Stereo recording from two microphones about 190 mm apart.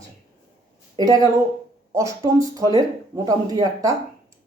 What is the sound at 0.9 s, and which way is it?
Speech, 20° right (ahead or behind).